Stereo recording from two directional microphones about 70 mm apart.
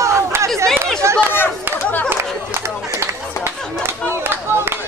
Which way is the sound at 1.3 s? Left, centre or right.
Left.